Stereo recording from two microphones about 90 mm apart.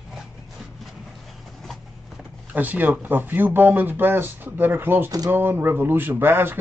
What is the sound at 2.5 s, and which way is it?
Speech, 20° right (ahead or behind).